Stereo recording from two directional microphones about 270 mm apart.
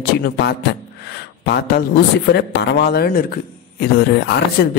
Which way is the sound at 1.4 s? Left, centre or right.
Left.